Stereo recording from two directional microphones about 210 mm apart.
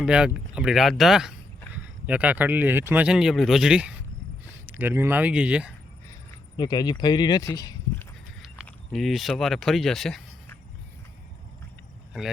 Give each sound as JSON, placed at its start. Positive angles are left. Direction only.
{"t": 0.0, "sound": "speech", "side_deg": -5}
{"t": 6.6, "sound": "speech", "side_deg": 20}
{"t": 8.6, "sound": "speech", "side_deg": 0}